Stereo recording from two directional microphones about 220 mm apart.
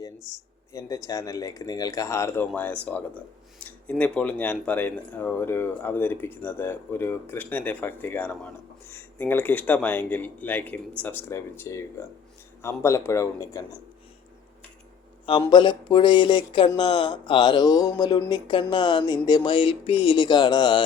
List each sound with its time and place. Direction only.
0.3 s speech: 15° left (ahead or behind)
15.3 s speech: 20° left (ahead or behind)